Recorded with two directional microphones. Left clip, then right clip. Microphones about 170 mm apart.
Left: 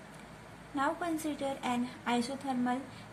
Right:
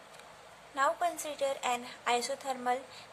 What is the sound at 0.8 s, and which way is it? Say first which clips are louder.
A woman's voice: right 3 dB; 15° right (ahead or behind).